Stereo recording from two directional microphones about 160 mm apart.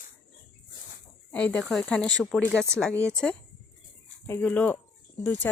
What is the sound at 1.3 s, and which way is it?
Speech, 5° left (ahead or behind).